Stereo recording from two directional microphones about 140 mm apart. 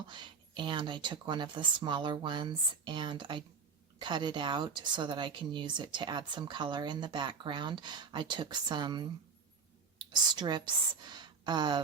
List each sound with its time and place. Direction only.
0.1 s a woman's voice: 35° right (ahead or behind)
10.1 s a woman's voice: 30° right (ahead or behind)